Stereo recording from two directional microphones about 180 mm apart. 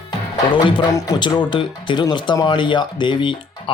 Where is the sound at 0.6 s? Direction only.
25° left (ahead or behind).